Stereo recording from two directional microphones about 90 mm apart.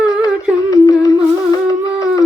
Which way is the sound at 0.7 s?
40° left (ahead or behind).